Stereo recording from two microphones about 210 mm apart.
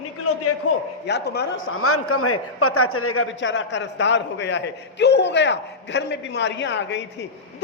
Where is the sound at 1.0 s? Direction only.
55° left (ahead or behind).